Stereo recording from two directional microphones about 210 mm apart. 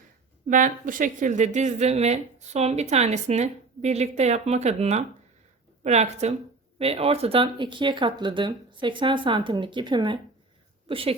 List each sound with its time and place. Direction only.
0.4 s a woman's voice: 40° right (ahead or behind)